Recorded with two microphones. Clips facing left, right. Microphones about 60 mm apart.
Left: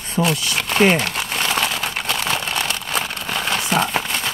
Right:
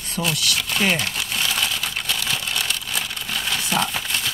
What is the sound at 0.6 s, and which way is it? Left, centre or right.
Crumpling, left.